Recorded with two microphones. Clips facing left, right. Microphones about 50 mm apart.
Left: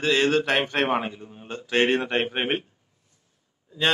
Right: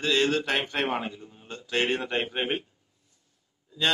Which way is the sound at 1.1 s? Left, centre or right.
Left.